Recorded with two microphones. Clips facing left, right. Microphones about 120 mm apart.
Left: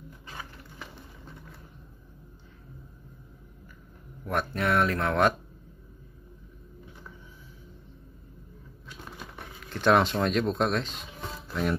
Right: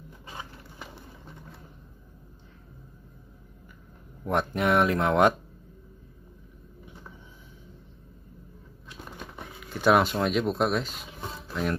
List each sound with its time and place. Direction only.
4.2 s speech: 20° right (ahead or behind)
9.6 s speech: 5° right (ahead or behind)